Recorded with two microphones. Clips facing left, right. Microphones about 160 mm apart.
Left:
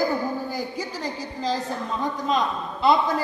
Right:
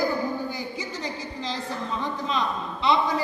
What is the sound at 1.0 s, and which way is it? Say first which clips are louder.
A woman's voice: left 7 dB; 45° left (ahead or behind).